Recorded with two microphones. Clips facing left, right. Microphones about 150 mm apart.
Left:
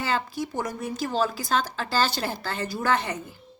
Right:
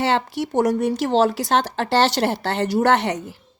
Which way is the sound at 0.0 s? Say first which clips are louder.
Right 7 dB; 75° right (ahead or behind).